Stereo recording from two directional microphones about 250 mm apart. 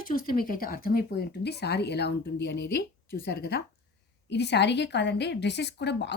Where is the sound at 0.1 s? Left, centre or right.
Left.